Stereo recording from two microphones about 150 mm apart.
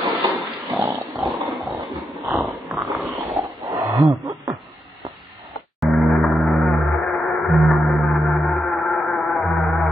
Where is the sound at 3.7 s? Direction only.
20° right (ahead or behind).